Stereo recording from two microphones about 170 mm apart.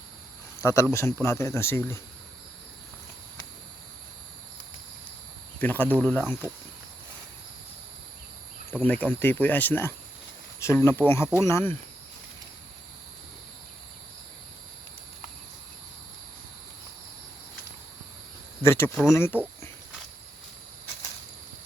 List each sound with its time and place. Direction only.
0.6 s speech: 20° left (ahead or behind)
5.5 s speech: 10° left (ahead or behind)
8.9 s speech: 10° left (ahead or behind)
18.6 s speech: 15° left (ahead or behind)